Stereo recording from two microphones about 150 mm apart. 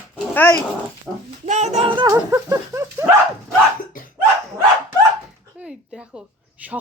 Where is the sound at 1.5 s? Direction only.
50° right (ahead or behind).